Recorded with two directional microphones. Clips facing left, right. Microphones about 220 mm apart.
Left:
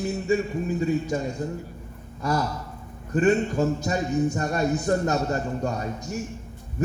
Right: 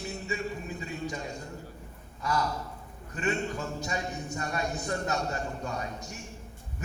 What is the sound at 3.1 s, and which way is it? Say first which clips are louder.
Speech: left 11 dB; 45° left (ahead or behind).